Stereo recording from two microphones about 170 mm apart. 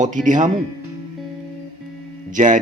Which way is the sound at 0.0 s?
50° right (ahead or behind).